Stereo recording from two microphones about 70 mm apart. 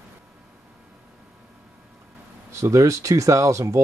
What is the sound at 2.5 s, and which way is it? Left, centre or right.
Speech, right.